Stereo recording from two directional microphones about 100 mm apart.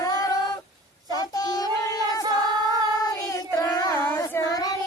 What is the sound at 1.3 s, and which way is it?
Child singing, 40° left (ahead or behind).